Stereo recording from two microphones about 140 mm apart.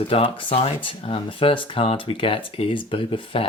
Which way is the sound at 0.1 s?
40° left (ahead or behind).